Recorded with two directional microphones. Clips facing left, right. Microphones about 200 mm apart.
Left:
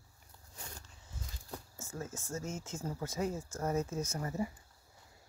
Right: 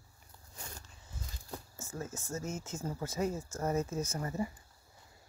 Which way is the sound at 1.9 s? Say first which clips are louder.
Right 1 dB; 5° right (ahead or behind).